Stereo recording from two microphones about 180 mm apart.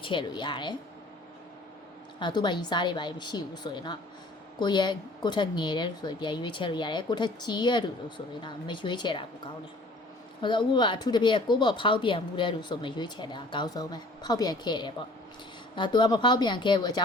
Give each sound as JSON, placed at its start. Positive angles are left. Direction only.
{"t": 0.0, "sound": "speech", "side_deg": 25}
{"t": 2.1, "sound": "speech", "side_deg": 25}